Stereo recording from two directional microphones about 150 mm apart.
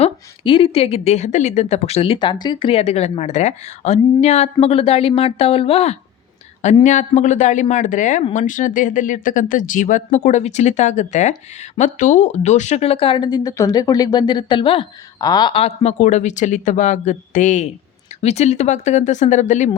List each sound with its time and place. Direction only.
0.0 s speech: 35° left (ahead or behind)
6.8 s speech: 55° left (ahead or behind)